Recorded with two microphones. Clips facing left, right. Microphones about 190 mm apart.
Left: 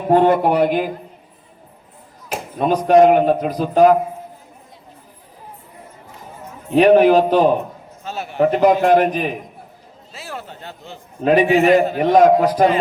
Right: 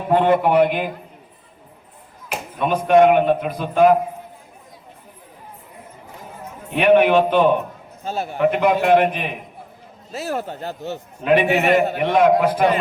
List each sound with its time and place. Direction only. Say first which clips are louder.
0.1 s a man's voice: left 2 dB; 40° left (ahead or behind)
2.6 s a man's voice: left 2 dB; 35° left (ahead or behind)
6.7 s a man's voice: left 3 dB; 35° left (ahead or behind)
8.0 s a man's voice: right 3 dB; 45° right (ahead or behind)
8.4 s a man's voice: left 4 dB; 35° left (ahead or behind)
10.1 s a man's voice: right 8 dB; 40° right (ahead or behind)
11.2 s a man's voice: left 3 dB; 40° left (ahead or behind)